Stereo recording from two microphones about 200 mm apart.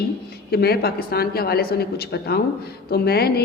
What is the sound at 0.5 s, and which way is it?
A woman's voice, 50° left (ahead or behind).